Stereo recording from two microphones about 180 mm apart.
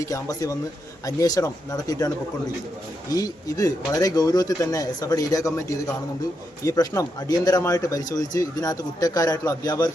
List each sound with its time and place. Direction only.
0.0 s speech: 20° left (ahead or behind)